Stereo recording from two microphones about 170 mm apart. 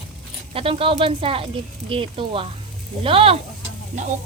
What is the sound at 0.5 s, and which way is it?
Speech, 30° right (ahead or behind).